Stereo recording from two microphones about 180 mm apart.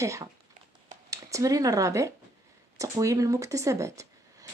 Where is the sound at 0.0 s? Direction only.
15° right (ahead or behind).